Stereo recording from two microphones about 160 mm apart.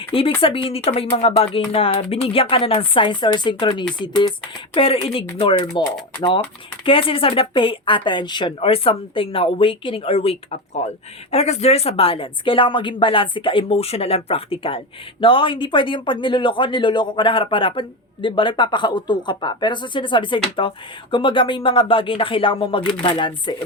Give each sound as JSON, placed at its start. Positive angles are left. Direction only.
{"t": 0.0, "sound": "speech", "side_deg": 35}
{"t": 6.8, "sound": "speech", "side_deg": 35}